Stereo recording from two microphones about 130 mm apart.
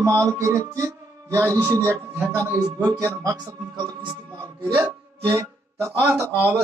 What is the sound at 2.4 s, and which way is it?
A man's voice, 25° right (ahead or behind).